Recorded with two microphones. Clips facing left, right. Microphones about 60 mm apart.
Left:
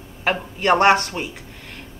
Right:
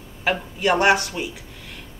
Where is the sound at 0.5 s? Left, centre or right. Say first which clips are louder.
Left 3 dB; left.